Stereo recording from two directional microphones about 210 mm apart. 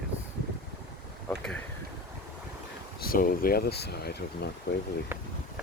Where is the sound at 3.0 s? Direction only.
45° left (ahead or behind).